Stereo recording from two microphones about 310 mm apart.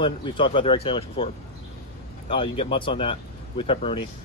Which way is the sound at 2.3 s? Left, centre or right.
Centre.